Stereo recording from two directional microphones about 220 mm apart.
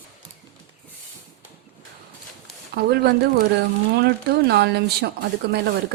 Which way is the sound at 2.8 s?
45° right (ahead or behind).